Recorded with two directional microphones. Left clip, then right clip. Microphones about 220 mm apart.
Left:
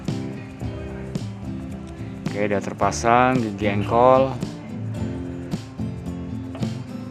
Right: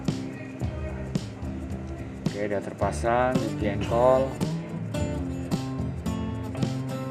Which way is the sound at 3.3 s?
Centre (ahead or behind).